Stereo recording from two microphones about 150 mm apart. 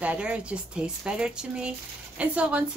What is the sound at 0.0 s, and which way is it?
Speech, 10° right (ahead or behind).